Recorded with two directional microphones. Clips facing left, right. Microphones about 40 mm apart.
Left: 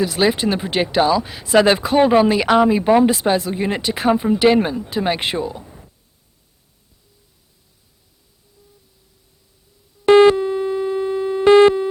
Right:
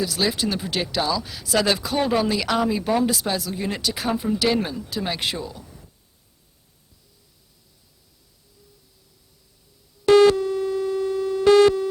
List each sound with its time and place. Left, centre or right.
0.0 s speech: left
10.1 s busy signal: left